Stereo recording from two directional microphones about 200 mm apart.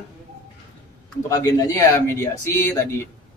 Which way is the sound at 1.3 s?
15° left (ahead or behind).